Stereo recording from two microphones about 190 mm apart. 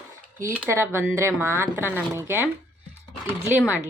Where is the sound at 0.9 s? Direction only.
10° right (ahead or behind).